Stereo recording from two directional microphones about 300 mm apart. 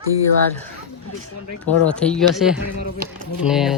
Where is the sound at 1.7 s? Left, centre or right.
Centre.